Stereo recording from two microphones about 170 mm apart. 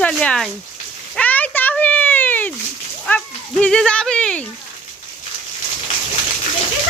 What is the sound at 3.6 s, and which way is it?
Speech, 5° left (ahead or behind).